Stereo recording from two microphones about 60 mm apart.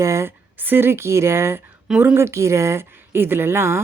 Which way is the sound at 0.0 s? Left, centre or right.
Right.